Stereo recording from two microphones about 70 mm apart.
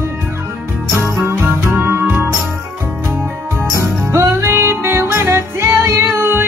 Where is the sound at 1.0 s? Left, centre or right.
Right.